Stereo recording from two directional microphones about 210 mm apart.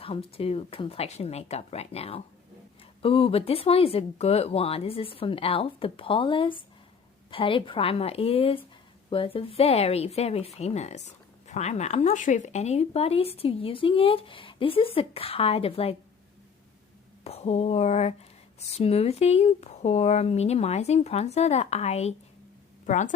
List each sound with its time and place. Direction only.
0.0 s a woman's voice: 25° left (ahead or behind)
17.2 s speech: 30° left (ahead or behind)